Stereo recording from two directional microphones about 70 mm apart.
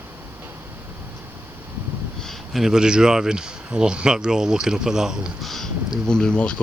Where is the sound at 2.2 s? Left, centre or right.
Centre.